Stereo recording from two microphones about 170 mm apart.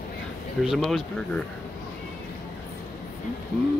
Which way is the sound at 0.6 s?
Centre (ahead or behind).